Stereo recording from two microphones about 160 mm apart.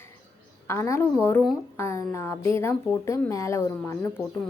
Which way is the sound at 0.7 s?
15° left (ahead or behind).